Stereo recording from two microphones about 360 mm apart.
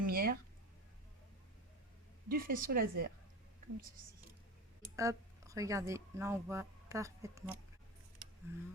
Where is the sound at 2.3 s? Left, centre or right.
Right.